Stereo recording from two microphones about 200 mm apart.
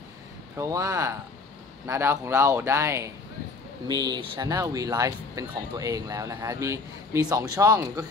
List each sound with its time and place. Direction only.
0.6 s speech: 15° right (ahead or behind)